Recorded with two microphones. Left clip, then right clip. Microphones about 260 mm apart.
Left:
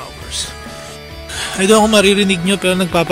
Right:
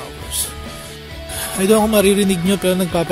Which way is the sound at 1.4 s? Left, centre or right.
Centre.